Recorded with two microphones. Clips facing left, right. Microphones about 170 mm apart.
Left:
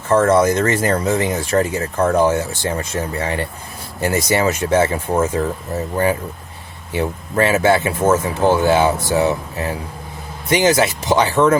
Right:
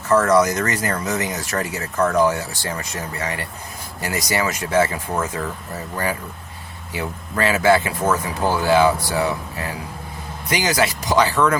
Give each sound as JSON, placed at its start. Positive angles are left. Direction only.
{"t": 0.1, "sound": "speech", "side_deg": 25}
{"t": 6.9, "sound": "speech", "side_deg": 25}